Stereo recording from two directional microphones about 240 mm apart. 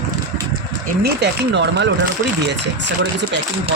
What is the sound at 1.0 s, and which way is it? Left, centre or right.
Speech, right.